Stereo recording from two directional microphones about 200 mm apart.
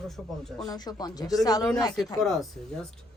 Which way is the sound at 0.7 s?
20° left (ahead or behind).